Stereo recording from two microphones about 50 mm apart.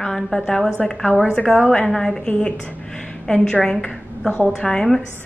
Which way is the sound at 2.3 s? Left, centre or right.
Left.